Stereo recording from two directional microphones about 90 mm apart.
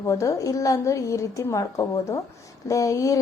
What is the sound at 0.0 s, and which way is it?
A woman's voice, 35° left (ahead or behind).